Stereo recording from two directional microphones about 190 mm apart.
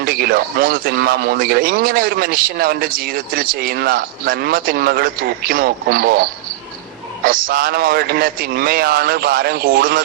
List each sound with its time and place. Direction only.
0.0 s speech: 50° right (ahead or behind)
7.3 s speech: 50° right (ahead or behind)